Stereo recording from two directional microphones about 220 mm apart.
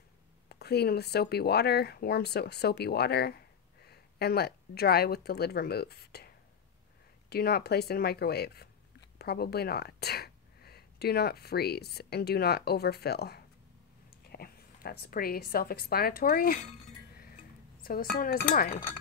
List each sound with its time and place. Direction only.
0.5 s a woman's voice: 45° left (ahead or behind)
17.8 s dishes: 40° left (ahead or behind)